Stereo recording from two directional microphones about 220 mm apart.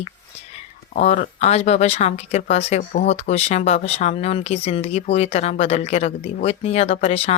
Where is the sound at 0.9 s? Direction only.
35° left (ahead or behind).